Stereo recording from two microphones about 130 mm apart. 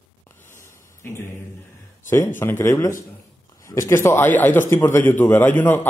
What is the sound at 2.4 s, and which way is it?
A man's voice, 20° left (ahead or behind).